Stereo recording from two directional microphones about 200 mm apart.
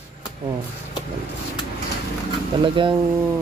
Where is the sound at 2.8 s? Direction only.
25° right (ahead or behind).